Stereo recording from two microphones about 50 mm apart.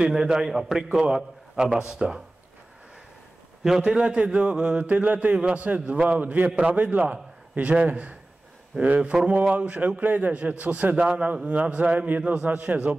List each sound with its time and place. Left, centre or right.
0.0 s a man's voice: centre
3.6 s a man's voice: centre
4.0 s a man's voice: right
4.4 s a man's voice: right